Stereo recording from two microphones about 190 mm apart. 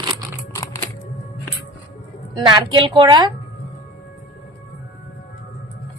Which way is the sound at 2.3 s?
25° right (ahead or behind).